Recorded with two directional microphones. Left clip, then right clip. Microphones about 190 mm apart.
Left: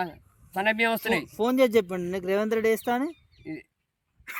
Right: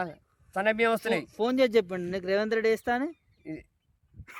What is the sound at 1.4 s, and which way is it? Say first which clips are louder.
Speech: left 2 dB; 30° left (ahead or behind).